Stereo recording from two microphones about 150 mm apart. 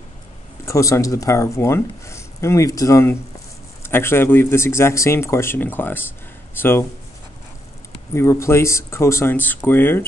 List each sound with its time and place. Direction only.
0.7 s a man's voice: 20° left (ahead or behind)
8.1 s a man's voice: 20° left (ahead or behind)